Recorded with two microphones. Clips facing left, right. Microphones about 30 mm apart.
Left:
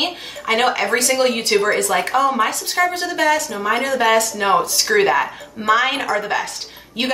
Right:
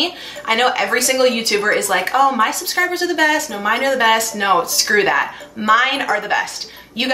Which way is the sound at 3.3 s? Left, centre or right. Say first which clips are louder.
Right 1 dB; right.